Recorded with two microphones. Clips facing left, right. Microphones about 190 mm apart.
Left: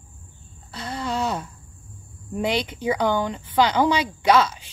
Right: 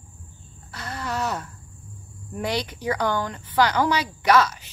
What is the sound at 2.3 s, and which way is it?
Speech, 20° left (ahead or behind).